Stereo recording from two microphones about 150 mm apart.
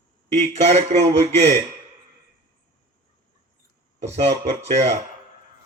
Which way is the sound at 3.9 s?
45° right (ahead or behind).